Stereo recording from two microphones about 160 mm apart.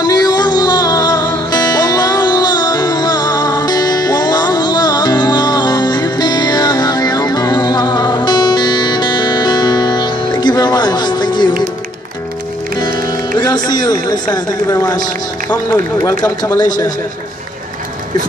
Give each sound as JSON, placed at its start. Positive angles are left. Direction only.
{"t": 0.0, "sound": "music", "side_deg": 25}
{"t": 12.7, "sound": "music", "side_deg": 25}
{"t": 13.4, "sound": "a man's voice", "side_deg": 25}